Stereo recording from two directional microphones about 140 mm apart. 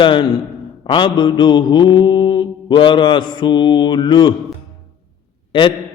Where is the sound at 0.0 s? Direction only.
35° left (ahead or behind).